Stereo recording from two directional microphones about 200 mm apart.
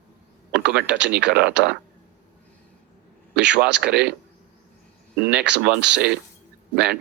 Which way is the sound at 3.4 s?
60° right (ahead or behind).